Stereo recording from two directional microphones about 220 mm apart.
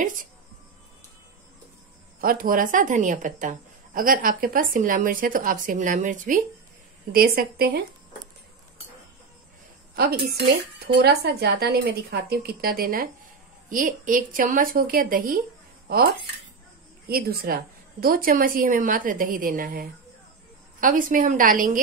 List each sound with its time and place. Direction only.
0.0 s a woman's voice: 35° right (ahead or behind)
2.1 s a woman's voice: 40° right (ahead or behind)
10.0 s a woman's voice: 45° right (ahead or behind)
17.1 s a woman's voice: 45° right (ahead or behind)